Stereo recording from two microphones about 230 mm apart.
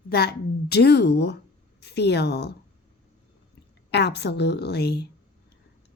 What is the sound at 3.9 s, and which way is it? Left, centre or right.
A woman's voice, left.